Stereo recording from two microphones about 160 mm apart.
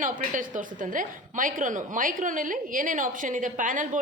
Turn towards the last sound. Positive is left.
turn(degrees=-55)  # may be behind; listen again after turning